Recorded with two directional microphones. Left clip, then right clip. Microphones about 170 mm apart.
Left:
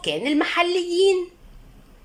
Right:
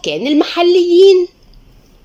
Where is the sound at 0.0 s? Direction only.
25° right (ahead or behind).